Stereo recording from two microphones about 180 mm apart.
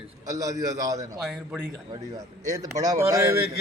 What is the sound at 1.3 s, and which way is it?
Speech, 5° right (ahead or behind).